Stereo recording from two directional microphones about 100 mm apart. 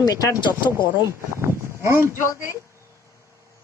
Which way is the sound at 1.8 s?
25° right (ahead or behind).